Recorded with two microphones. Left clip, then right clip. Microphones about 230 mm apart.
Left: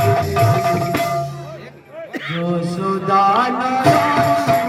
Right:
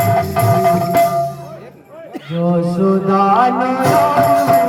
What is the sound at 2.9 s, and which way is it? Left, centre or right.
Music, left.